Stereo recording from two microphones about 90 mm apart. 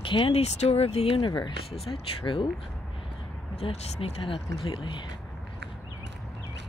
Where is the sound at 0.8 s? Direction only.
90° left; by 2.5 s 70° left (ahead or behind).